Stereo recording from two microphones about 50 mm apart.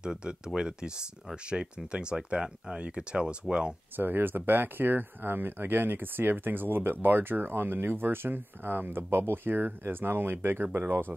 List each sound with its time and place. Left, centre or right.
0.0 s speech: centre
3.9 s speech: right